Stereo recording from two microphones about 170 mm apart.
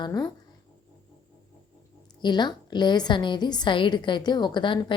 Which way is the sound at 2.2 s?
25° left (ahead or behind).